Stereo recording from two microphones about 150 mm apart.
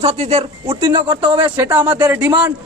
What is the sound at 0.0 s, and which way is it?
A man's voice, 45° right (ahead or behind).